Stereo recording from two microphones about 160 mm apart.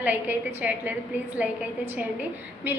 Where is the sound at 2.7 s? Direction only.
15° right (ahead or behind).